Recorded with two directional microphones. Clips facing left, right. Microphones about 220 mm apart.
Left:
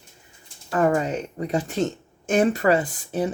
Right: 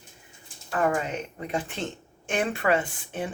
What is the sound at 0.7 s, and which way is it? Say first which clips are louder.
Speech: left 5 dB; 40° left (ahead or behind).